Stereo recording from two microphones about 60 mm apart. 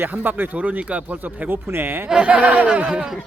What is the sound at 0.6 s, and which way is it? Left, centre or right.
Speech, right.